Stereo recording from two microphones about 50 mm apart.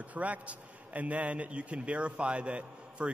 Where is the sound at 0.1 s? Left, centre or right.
Right.